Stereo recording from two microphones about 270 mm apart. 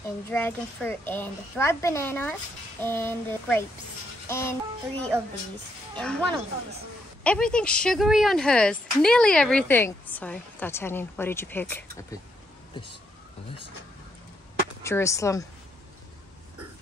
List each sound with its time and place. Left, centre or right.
0.3 s a child's voice: centre
5.1 s a woman's voice: centre
5.9 s speech: centre
7.2 s speech: centre
14.8 s a child's voice: centre